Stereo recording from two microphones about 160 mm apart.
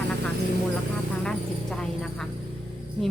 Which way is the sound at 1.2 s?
5° left (ahead or behind).